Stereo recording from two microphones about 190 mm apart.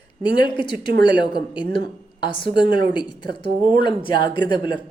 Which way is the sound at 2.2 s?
25° left (ahead or behind).